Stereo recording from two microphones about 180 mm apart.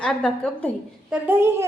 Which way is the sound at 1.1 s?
10° right (ahead or behind).